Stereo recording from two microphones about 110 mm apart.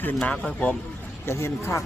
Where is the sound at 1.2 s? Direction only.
25° left (ahead or behind).